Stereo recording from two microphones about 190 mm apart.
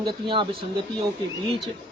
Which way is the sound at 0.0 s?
25° right (ahead or behind).